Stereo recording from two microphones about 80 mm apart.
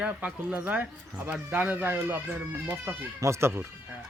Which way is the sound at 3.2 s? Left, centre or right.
Right.